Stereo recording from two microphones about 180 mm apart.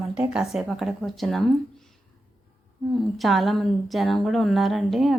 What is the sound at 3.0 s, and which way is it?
A woman's voice, centre (ahead or behind).